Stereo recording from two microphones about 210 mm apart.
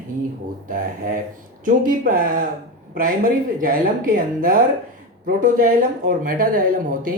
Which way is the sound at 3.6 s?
40° right (ahead or behind).